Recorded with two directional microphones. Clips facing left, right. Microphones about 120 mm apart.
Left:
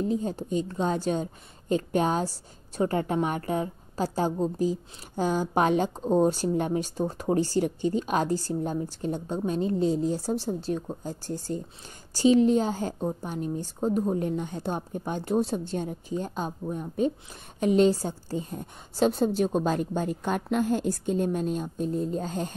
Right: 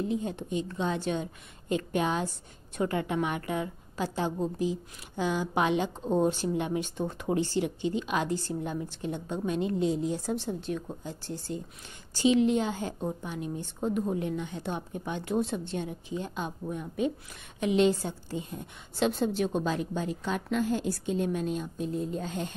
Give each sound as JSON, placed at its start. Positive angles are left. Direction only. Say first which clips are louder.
{"t": 0.0, "sound": "a woman's voice", "louder": "left 3 dB", "side_deg": 35}